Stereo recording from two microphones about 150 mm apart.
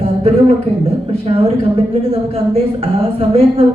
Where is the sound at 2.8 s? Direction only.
40° right (ahead or behind).